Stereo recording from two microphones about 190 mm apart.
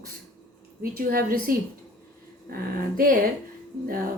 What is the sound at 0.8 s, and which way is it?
A woman's voice, 50° right (ahead or behind).